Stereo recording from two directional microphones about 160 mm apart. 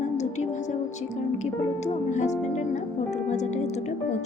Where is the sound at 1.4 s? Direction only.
45° left (ahead or behind).